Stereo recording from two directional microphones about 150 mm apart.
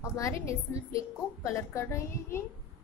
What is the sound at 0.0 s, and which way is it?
A woman's voice, 20° left (ahead or behind).